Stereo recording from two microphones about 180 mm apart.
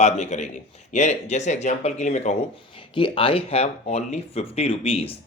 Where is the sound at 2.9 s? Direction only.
30° left (ahead or behind).